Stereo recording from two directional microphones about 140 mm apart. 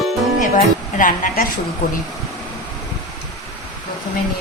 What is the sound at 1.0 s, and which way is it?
Speech, 70° left (ahead or behind).